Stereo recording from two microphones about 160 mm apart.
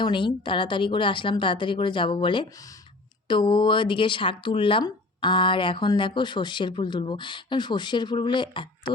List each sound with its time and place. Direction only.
0.0 s a woman's voice: 30° left (ahead or behind)